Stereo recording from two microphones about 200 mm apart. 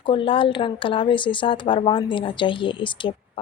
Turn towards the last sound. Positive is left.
turn(degrees=25)  # may be behind; listen again after turning